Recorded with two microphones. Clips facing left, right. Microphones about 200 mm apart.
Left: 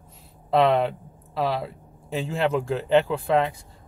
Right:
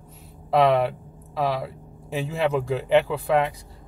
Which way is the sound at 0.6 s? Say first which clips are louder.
Right 1 dB; 10° right (ahead or behind).